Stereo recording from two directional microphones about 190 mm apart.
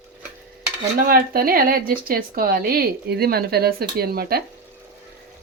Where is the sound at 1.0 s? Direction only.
50° right (ahead or behind).